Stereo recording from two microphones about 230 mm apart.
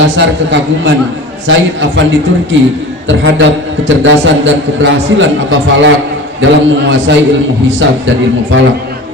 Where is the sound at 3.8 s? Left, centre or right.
Right.